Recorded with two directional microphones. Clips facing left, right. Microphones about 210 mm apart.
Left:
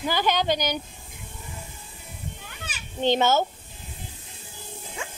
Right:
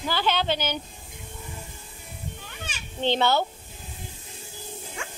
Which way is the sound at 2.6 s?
10° left (ahead or behind).